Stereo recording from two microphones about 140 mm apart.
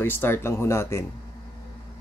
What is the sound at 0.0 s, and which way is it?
Speech, 15° left (ahead or behind).